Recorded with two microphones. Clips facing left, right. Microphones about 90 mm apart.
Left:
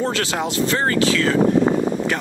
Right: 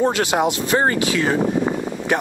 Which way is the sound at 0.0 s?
15° right (ahead or behind).